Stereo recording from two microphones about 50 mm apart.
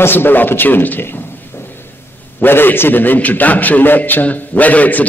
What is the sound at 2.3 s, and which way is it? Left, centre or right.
A man's voice, left.